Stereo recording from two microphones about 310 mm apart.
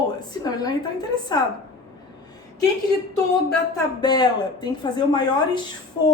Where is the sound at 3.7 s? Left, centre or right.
Centre.